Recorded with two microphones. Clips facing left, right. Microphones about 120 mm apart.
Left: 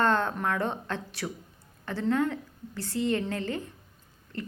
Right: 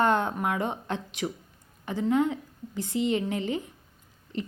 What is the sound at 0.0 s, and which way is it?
A woman's voice, 15° right (ahead or behind).